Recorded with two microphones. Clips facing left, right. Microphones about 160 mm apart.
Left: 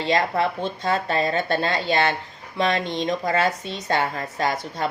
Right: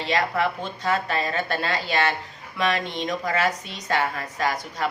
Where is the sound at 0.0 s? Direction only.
35° left (ahead or behind).